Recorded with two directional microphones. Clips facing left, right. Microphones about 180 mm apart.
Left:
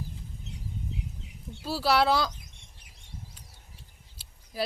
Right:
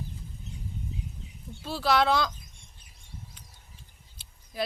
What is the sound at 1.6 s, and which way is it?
Speech, 5° left (ahead or behind).